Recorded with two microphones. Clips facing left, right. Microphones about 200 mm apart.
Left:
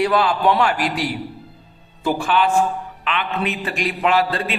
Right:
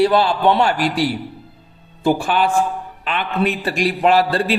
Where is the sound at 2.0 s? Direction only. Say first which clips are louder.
Right 2 dB; 30° right (ahead or behind).